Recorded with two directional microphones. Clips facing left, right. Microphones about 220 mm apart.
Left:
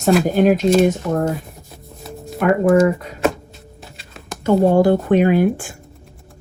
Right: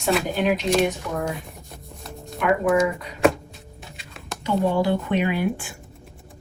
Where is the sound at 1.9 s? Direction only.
Centre (ahead or behind).